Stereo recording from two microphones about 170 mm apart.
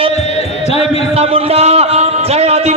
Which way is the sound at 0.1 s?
40° left (ahead or behind).